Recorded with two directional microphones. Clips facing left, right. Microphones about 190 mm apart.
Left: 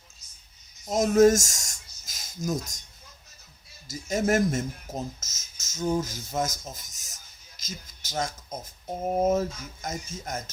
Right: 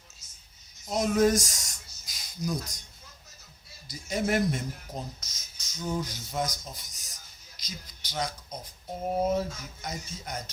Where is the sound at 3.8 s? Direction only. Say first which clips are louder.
Left 4 dB; 45° left (ahead or behind).